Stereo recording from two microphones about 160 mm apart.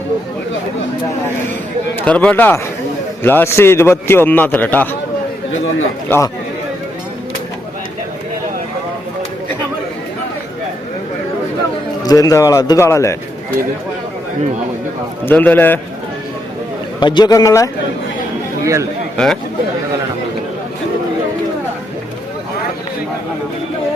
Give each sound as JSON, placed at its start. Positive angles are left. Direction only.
{"t": 2.0, "sound": "a man's voice", "side_deg": 10}
{"t": 6.1, "sound": "a man's voice", "side_deg": 15}
{"t": 12.0, "sound": "speech", "side_deg": 20}
{"t": 15.2, "sound": "a man's voice", "side_deg": 10}
{"t": 17.0, "sound": "speech", "side_deg": 25}
{"t": 18.6, "sound": "a man's voice", "side_deg": -20}
{"t": 19.1, "sound": "speech", "side_deg": 0}